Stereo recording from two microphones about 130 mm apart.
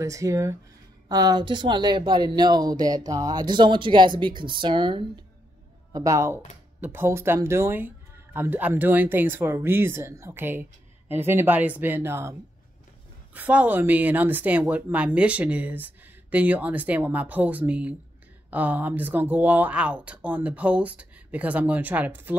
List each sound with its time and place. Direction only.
0.0 s speech: 25° right (ahead or behind); by 5.2 s 40° right (ahead or behind)
5.9 s speech: 25° right (ahead or behind)